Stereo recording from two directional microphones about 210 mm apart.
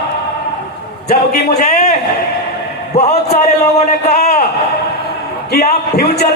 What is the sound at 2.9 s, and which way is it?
Speech, 30° left (ahead or behind).